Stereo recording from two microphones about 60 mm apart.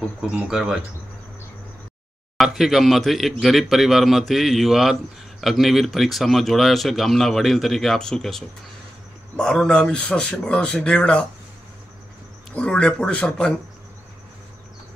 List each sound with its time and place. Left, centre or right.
0.5 s speech: centre
2.3 s a man's voice: centre
12.5 s a man's voice: centre